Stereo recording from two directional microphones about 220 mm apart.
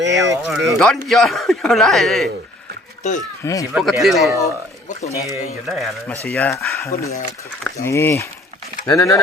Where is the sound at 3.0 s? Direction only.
35° left (ahead or behind).